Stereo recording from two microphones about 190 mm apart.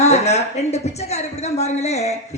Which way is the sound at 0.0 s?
35° left (ahead or behind).